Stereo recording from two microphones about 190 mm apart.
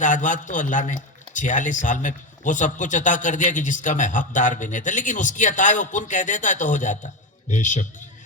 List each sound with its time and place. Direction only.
0.0 s a man's voice: 40° left (ahead or behind)